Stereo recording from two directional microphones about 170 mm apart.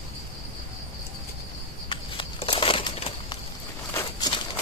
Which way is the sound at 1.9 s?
30° left (ahead or behind).